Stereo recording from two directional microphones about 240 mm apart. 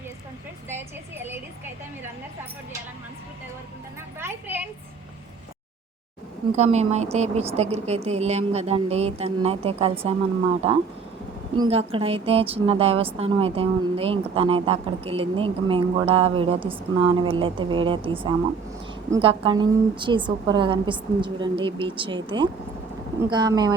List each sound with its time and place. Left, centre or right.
0.7 s a sound: centre
4.2 s a woman's voice: centre
6.6 s a woman's voice: right